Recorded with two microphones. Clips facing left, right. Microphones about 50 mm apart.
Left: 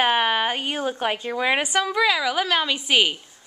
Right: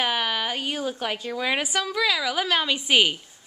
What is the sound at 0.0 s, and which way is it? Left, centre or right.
A woman's voice, left.